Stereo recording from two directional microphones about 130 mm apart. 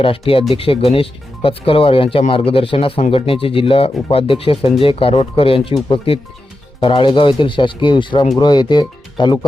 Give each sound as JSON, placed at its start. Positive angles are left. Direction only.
{"t": 0.0, "sound": "speech", "side_deg": 45}
{"t": 6.7, "sound": "speech", "side_deg": 40}